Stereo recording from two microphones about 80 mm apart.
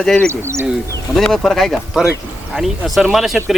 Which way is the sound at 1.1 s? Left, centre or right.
Centre.